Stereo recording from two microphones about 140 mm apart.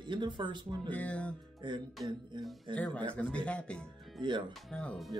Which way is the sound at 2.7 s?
10° left (ahead or behind).